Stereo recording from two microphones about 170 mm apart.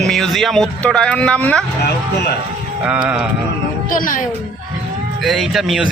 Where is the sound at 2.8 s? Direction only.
5° right (ahead or behind).